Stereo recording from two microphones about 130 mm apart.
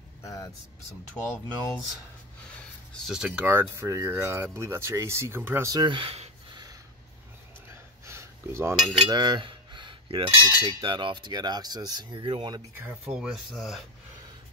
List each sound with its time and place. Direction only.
0.2 s vehicle: 25° left (ahead or behind)
1.1 s speech: 20° left (ahead or behind)
3.1 s speech: 5° right (ahead or behind); by 5.9 s 25° right (ahead or behind)
5.9 s speech: 45° right (ahead or behind)
8.0 s a sound: 20° right (ahead or behind)
8.9 s cutlery: 35° right (ahead or behind)
12.7 s speech: 15° right (ahead or behind)
13.1 s speech: 5° right (ahead or behind)